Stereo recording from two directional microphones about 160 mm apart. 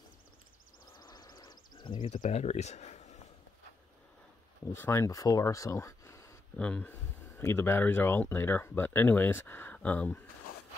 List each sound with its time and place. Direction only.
1.0 s a sound: 25° left (ahead or behind)
2.1 s speech: 50° left (ahead or behind)
4.7 s speech: 15° left (ahead or behind)
6.5 s speech: 5° left (ahead or behind)